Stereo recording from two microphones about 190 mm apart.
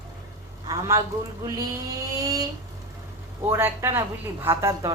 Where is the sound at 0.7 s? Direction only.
15° right (ahead or behind).